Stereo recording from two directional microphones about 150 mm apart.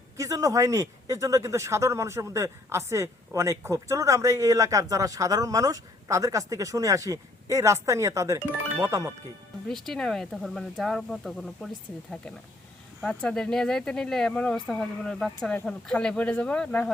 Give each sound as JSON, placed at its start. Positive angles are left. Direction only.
{"t": 0.2, "sound": "speech", "side_deg": -20}
{"t": 9.6, "sound": "speech", "side_deg": 0}
{"t": 13.0, "sound": "speech", "side_deg": 5}